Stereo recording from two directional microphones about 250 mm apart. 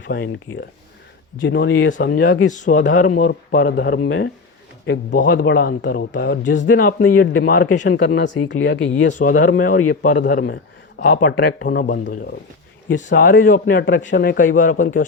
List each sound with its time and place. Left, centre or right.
0.1 s speech: left
1.9 s speech: left
6.7 s speech: left
9.1 s speech: left